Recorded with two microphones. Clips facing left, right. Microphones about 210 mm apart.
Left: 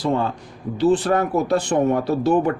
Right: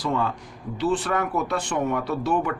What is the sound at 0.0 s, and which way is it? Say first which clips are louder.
Speech: left 4 dB; 30° left (ahead or behind).